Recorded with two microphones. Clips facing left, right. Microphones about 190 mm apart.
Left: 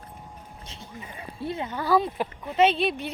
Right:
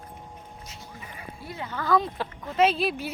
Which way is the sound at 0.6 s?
25° left (ahead or behind).